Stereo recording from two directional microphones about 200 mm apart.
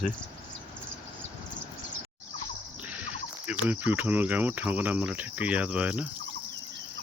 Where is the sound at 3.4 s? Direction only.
5° right (ahead or behind).